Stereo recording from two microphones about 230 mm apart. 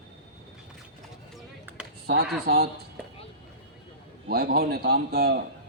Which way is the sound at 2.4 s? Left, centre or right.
Right.